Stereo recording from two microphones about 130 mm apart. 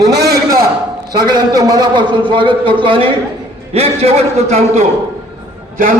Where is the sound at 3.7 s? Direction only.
50° right (ahead or behind).